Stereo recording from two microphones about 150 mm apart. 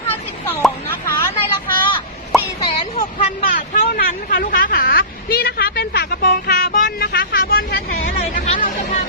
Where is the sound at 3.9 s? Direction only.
70° left (ahead or behind).